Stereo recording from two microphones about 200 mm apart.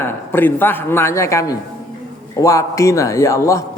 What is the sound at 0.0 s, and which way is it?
A man's voice, 10° left (ahead or behind).